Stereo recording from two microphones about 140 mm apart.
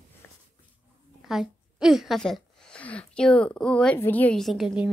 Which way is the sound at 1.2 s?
Centre (ahead or behind).